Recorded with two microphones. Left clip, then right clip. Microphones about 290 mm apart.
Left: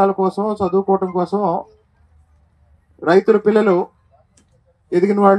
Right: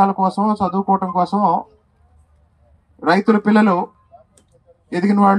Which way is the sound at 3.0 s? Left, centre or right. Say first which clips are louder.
Left 3 dB; right.